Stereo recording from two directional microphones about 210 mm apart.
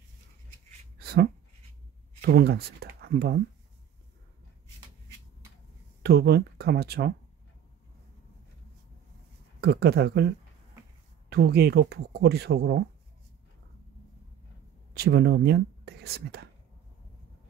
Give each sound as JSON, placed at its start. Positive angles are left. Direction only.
{"t": 0.9, "sound": "a sound", "side_deg": -50}
{"t": 2.2, "sound": "speech", "side_deg": -50}
{"t": 6.0, "sound": "speech", "side_deg": -50}
{"t": 9.6, "sound": "speech", "side_deg": -50}
{"t": 15.0, "sound": "speech", "side_deg": -50}